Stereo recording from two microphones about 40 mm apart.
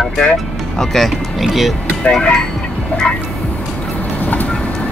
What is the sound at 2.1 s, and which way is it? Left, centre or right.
Speech, centre.